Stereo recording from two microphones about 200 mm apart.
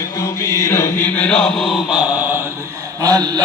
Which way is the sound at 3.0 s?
20° right (ahead or behind).